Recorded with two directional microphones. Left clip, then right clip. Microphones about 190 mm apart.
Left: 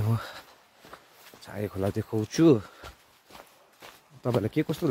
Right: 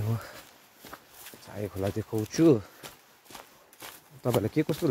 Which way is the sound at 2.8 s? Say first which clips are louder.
Even; 75° right (ahead or behind).